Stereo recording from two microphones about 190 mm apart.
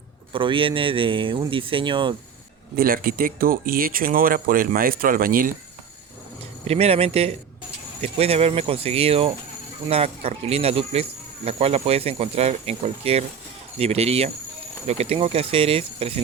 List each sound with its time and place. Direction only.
0.3 s speech: 25° right (ahead or behind)
2.7 s speech: 50° right (ahead or behind)
6.7 s speech: 30° right (ahead or behind)